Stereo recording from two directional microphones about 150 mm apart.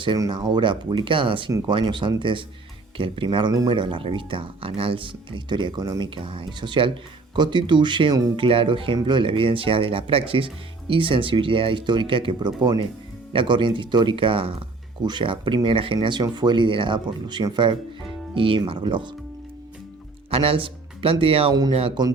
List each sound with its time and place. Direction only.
0.0 s speech: 30° right (ahead or behind)
20.3 s a man's voice: 40° right (ahead or behind)